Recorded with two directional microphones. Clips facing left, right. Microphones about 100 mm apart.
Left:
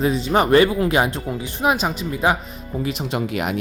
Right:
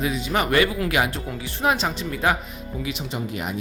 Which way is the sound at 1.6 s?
15° left (ahead or behind).